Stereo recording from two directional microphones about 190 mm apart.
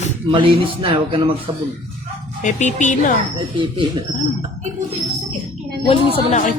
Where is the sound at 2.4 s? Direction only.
40° left (ahead or behind).